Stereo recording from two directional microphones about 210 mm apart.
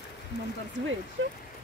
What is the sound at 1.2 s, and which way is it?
Speech, 60° right (ahead or behind).